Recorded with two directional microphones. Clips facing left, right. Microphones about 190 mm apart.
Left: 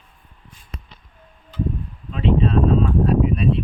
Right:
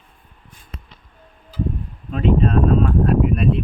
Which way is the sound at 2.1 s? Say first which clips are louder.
Right 1 dB; 50° right (ahead or behind).